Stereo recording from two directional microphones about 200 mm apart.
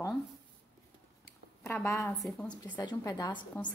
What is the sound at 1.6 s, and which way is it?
Speech, 15° left (ahead or behind).